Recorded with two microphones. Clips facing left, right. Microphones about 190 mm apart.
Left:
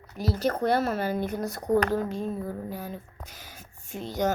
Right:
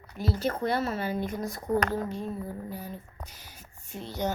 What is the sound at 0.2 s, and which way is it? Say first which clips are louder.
Speech: left 3 dB; 40° left (ahead or behind).